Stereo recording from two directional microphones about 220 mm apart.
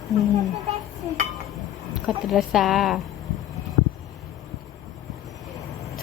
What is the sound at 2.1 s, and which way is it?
Speech, centre (ahead or behind).